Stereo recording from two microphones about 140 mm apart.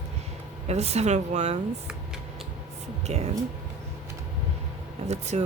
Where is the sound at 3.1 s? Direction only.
50° right (ahead or behind).